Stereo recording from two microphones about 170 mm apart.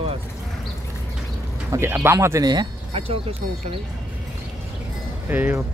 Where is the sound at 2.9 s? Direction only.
35° right (ahead or behind).